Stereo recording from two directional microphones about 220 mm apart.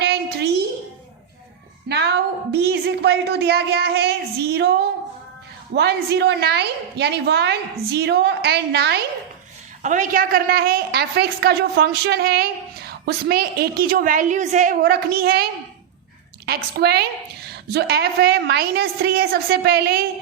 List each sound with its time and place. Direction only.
0.0 s a sound: 45° right (ahead or behind)
1.9 s a woman's voice: 50° right (ahead or behind)
9.8 s a woman's voice: 35° right (ahead or behind)
16.6 s a woman's voice: 45° right (ahead or behind)